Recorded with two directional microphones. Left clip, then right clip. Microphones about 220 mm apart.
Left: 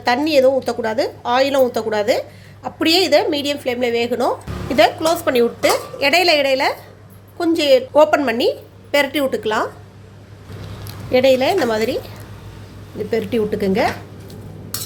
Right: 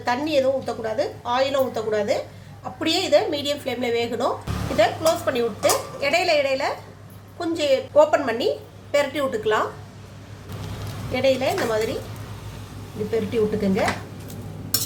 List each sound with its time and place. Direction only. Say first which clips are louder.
0.0 s a woman's voice: left 7 dB; 45° left (ahead or behind)
11.1 s a woman's voice: left 7 dB; 45° left (ahead or behind)
13.1 s a woman's voice: left 3 dB; 50° left (ahead or behind)